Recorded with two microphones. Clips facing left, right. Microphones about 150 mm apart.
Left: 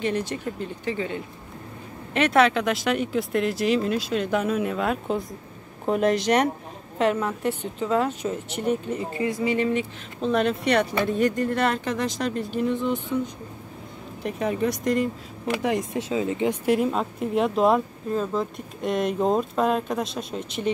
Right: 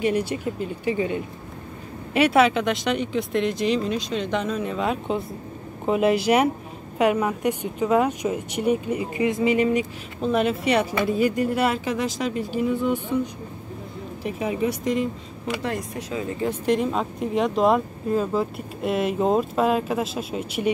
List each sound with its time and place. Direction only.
0.0 s a woman's voice: 10° right (ahead or behind)
14.2 s speech: 5° right (ahead or behind)
15.6 s speech: 15° left (ahead or behind)
16.6 s speech: 5° left (ahead or behind)